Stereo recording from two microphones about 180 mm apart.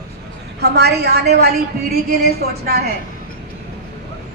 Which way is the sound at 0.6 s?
65° right (ahead or behind).